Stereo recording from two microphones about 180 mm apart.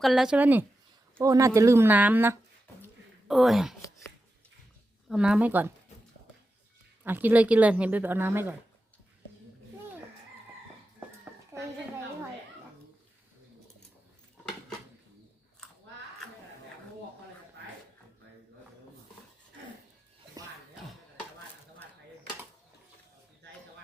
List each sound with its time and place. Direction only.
0.0 s a woman's voice: centre (ahead or behind)
3.2 s a woman's voice: centre (ahead or behind)
5.0 s speech: 5° right (ahead or behind)
7.0 s speech: 10° right (ahead or behind)
11.5 s a sound: 15° right (ahead or behind)
20.4 s music: 20° right (ahead or behind)